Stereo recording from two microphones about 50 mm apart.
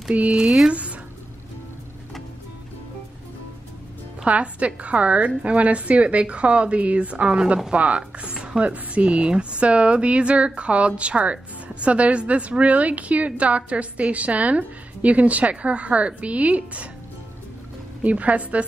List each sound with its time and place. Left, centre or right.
0.1 s a woman's voice: right
0.5 s speech: centre
4.3 s a woman's voice: right
18.0 s a woman's voice: right